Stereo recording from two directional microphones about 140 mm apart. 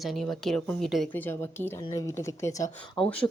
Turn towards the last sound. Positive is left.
turn(degrees=5)  # may be behind; listen again after turning